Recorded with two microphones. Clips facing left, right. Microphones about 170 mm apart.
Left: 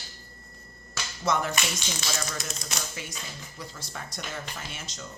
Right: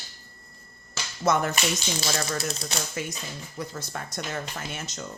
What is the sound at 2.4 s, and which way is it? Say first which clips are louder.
Speech: right 7 dB; 30° right (ahead or behind).